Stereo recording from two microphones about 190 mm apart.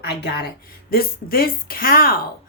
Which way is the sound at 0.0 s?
55° left (ahead or behind).